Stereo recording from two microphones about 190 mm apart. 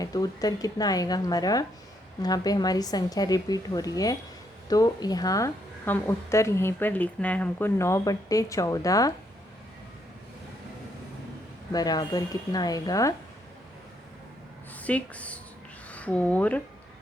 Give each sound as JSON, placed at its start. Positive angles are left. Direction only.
{"t": 0.0, "sound": "a woman's voice", "side_deg": 20}
{"t": 11.7, "sound": "a woman's voice", "side_deg": 20}
{"t": 14.8, "sound": "speech", "side_deg": 5}